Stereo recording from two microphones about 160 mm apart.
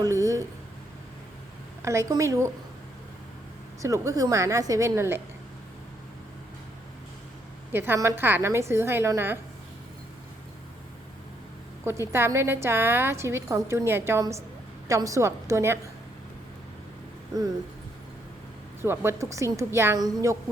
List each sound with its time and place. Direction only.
0.0 s a sound: 20° right (ahead or behind)
1.8 s a woman's voice: 20° right (ahead or behind)
3.8 s a woman's voice: 20° right (ahead or behind)
7.7 s a woman's voice: 15° right (ahead or behind)
11.9 s a woman's voice: 15° right (ahead or behind)
18.8 s a woman's voice: 15° right (ahead or behind)